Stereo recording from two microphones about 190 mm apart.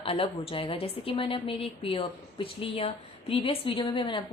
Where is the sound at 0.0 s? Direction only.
30° left (ahead or behind).